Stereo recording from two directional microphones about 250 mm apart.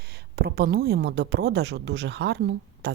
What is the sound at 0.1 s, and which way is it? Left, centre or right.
A woman's voice, right.